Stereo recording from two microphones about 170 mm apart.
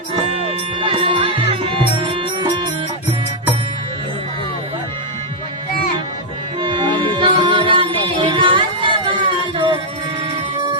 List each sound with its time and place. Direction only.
0.1 s music: 35° right (ahead or behind)
6.6 s music: 30° right (ahead or behind)